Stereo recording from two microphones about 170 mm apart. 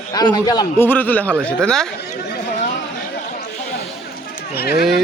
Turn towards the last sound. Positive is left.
turn(degrees=70)  # may be behind; listen again after turning